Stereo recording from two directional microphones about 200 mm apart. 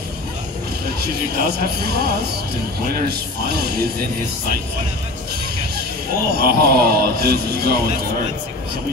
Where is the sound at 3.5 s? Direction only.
50° right (ahead or behind).